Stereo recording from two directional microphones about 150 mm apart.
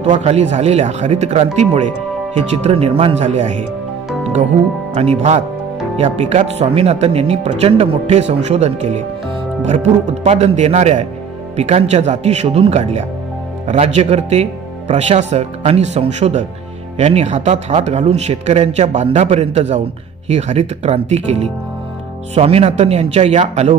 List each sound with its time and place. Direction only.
0.0 s speech: 45° right (ahead or behind)
4.9 s speech: 45° right (ahead or behind)